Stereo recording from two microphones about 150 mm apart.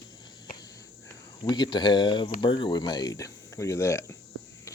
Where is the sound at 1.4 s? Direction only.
30° left (ahead or behind).